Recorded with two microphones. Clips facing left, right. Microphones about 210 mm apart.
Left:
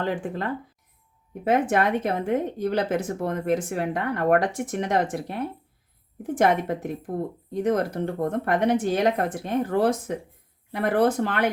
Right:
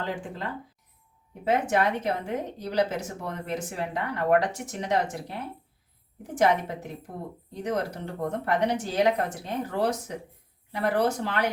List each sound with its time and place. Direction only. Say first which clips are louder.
0.0 s a woman's voice: left 6 dB; 55° left (ahead or behind)
1.5 s a woman's voice: left 3 dB; 50° left (ahead or behind)